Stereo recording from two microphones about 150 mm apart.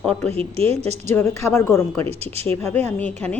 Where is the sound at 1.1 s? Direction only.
15° left (ahead or behind).